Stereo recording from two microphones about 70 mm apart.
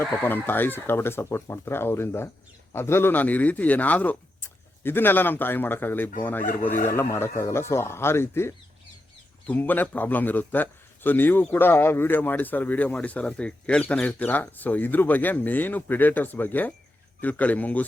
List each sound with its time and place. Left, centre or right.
0.0 s a man's voice: left
9.5 s a man's voice: left